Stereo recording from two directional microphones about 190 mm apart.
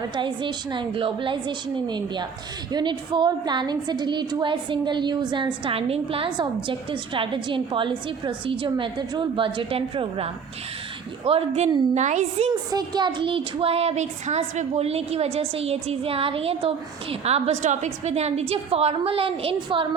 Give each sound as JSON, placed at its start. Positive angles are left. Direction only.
{"t": 0.2, "sound": "a woman's voice", "side_deg": -25}
{"t": 11.3, "sound": "speech", "side_deg": -30}
{"t": 12.7, "sound": "speech", "side_deg": -20}